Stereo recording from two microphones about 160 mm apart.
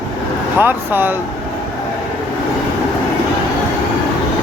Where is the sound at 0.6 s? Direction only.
10° right (ahead or behind).